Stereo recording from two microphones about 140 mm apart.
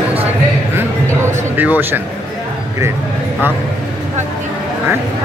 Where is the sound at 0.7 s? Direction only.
15° right (ahead or behind).